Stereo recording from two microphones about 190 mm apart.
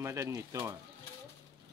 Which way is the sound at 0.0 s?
15° right (ahead or behind).